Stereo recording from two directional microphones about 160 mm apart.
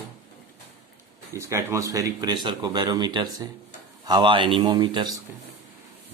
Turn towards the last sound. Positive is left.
turn(degrees=-25)  # may be behind; listen again after turning